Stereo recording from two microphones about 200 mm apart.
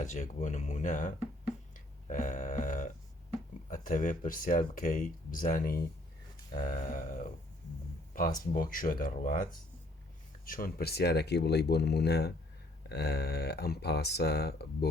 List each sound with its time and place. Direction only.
0.0 s speech: 35° left (ahead or behind)
1.7 s a sound: 40° left (ahead or behind)
3.7 s speech: 40° left (ahead or behind)